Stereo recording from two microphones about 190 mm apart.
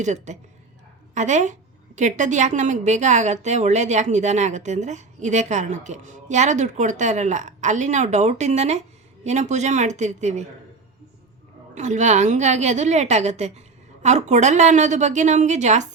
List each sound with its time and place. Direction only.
0.0 s a woman's voice: 40° right (ahead or behind)
11.7 s a woman's voice: 40° right (ahead or behind)